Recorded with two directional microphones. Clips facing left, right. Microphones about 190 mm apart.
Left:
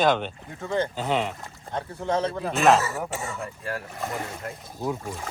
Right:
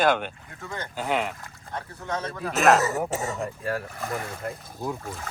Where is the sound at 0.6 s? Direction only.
25° left (ahead or behind).